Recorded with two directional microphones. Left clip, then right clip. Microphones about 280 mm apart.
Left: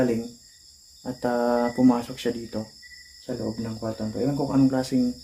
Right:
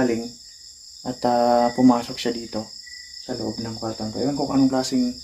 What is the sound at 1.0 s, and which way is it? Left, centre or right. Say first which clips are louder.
Cricket: right 5 dB; centre.